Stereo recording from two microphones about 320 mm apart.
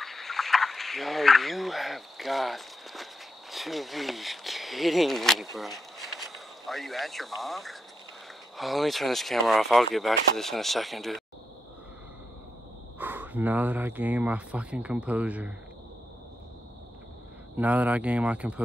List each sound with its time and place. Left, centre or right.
0.0 s speech: centre
13.0 s speech: centre
17.6 s speech: centre